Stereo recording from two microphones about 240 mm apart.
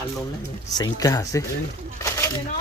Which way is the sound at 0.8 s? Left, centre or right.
Centre.